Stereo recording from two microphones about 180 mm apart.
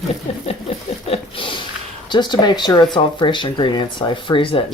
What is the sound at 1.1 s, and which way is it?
Speech, 30° left (ahead or behind).